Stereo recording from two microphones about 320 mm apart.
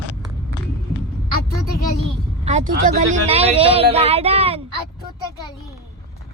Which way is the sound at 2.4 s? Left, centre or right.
Right.